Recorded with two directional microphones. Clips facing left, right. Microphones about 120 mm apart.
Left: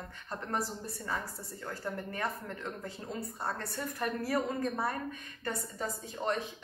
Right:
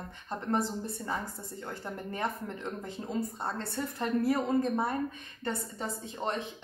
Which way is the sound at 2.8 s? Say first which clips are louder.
Right 5 dB; 20° right (ahead or behind).